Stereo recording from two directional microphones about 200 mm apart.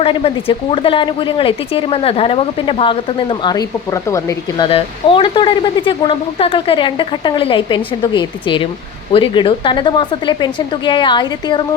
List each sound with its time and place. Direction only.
0.0 s speech: 30° left (ahead or behind)